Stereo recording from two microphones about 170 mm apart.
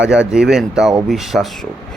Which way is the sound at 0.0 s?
5° right (ahead or behind).